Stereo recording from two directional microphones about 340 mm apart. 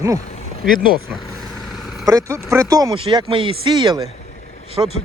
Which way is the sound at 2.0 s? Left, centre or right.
Centre.